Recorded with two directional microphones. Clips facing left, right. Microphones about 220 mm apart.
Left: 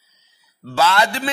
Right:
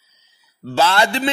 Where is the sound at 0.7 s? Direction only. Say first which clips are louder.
Right 1 dB; 30° right (ahead or behind).